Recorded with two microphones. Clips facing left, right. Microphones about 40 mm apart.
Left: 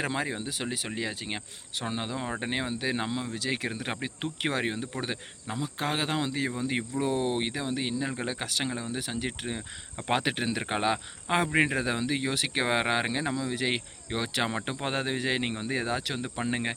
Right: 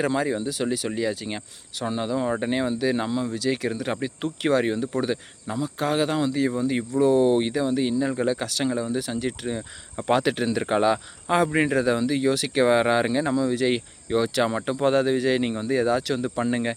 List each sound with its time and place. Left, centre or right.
0.0 s speech: left